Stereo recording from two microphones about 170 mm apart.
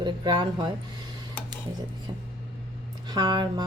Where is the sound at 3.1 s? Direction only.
25° right (ahead or behind).